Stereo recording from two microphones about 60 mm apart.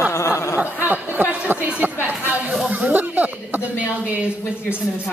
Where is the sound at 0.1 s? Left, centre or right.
Left.